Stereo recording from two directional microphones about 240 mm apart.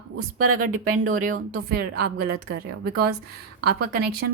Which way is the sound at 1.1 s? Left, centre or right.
Right.